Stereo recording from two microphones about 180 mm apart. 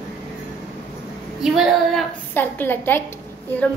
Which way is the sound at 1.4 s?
5° right (ahead or behind).